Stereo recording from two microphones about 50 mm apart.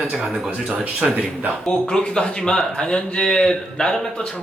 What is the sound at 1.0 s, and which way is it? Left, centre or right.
Speech, centre.